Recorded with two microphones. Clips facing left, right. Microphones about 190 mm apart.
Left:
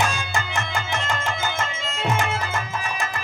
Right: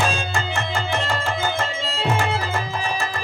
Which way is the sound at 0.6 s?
35° right (ahead or behind).